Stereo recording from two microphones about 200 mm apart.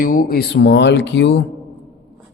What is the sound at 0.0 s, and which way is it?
Speech, 45° left (ahead or behind).